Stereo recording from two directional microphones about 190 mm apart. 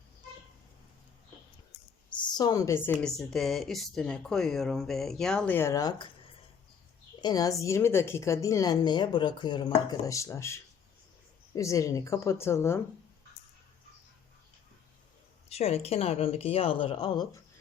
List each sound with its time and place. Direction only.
2.1 s a woman's voice: 25° left (ahead or behind)
7.2 s a woman's voice: 20° left (ahead or behind)
15.4 s speech: 35° left (ahead or behind)